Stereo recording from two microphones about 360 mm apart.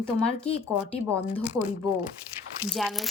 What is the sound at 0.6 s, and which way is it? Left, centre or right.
A woman's voice, centre.